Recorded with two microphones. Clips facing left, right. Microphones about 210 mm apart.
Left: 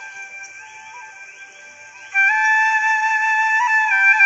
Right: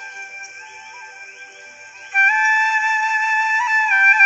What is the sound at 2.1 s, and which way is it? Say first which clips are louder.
Music: even; 40° right (ahead or behind).